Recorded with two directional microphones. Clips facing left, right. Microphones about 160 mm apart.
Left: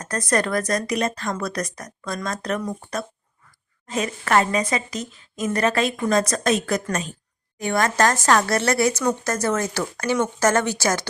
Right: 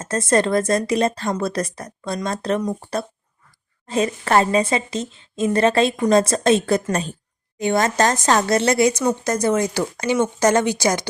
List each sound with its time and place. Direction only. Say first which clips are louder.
0.0 s a woman's voice: right 4 dB; 25° right (ahead or behind)